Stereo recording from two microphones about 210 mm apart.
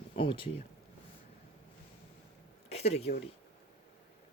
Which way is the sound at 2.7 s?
30° left (ahead or behind).